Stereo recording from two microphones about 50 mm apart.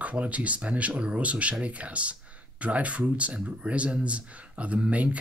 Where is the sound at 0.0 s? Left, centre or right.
Right.